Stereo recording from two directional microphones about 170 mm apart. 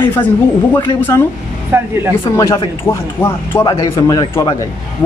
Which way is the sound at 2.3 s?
15° left (ahead or behind).